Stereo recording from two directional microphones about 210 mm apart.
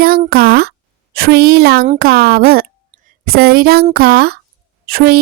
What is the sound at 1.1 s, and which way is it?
A woman's voice, 45° right (ahead or behind).